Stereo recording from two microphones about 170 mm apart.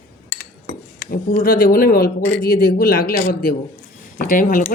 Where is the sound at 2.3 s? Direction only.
65° left (ahead or behind).